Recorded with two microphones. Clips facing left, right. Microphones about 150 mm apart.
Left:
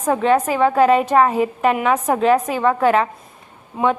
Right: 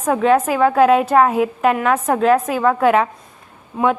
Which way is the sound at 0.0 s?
Centre (ahead or behind).